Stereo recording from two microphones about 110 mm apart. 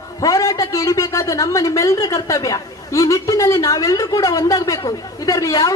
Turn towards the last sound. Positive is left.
turn(degrees=30)  # may be behind; listen again after turning